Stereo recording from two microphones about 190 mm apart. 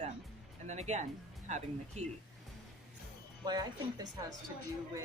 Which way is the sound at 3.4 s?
20° right (ahead or behind).